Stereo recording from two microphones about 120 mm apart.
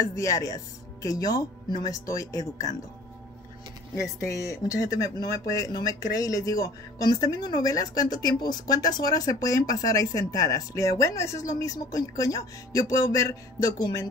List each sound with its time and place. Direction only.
0.0 s speech: 30° left (ahead or behind)
3.9 s speech: 25° left (ahead or behind)